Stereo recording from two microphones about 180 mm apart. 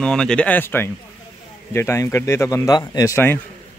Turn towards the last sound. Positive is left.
turn(degrees=15)  # may be behind; listen again after turning